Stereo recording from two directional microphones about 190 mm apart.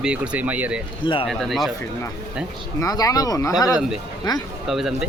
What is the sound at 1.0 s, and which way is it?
Speech, 25° left (ahead or behind).